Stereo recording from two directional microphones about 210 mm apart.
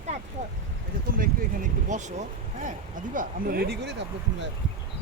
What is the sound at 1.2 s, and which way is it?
Speech, 35° right (ahead or behind).